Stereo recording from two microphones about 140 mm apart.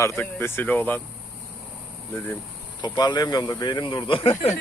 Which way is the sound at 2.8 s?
30° left (ahead or behind).